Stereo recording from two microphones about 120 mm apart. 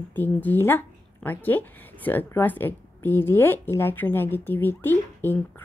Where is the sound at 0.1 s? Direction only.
15° left (ahead or behind).